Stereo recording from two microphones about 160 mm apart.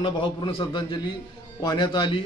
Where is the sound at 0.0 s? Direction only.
35° left (ahead or behind).